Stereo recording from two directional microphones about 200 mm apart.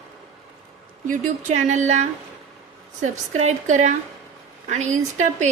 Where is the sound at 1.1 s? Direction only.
40° right (ahead or behind).